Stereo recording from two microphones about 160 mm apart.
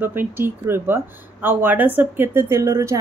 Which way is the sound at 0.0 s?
15° right (ahead or behind).